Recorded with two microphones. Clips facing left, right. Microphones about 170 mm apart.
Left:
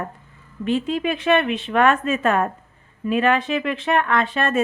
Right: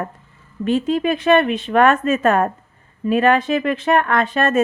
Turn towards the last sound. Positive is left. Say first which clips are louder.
# right 3 dB
turn(degrees=-45)  # may be behind; listen again after turning